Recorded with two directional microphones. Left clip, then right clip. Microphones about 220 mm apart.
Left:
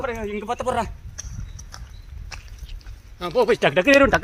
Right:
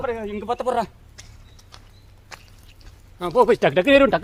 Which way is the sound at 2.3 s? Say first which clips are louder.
Left 2 dB; 15° right (ahead or behind).